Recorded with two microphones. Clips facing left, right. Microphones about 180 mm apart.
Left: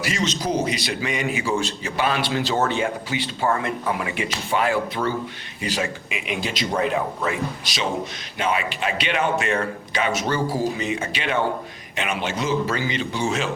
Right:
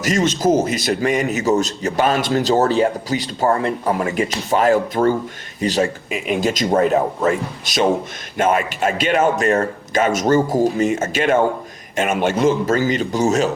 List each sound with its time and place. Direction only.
0.0 s a man's voice: 45° right (ahead or behind)